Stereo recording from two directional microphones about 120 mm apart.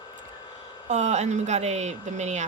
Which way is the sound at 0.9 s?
70° right (ahead or behind).